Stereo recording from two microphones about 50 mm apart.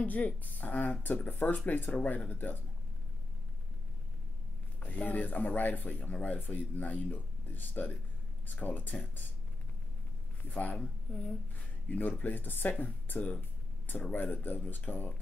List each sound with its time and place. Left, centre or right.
0.0 s speech: left
4.8 s speech: left
10.5 s speech: left